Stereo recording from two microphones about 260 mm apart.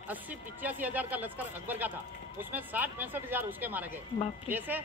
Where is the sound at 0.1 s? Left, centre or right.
Centre.